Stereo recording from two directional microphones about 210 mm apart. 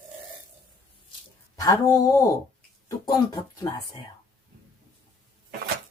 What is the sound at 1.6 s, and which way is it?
Speech, 15° left (ahead or behind).